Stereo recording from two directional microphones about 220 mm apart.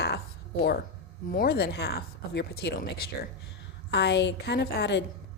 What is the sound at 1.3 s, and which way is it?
Speech, 45° left (ahead or behind).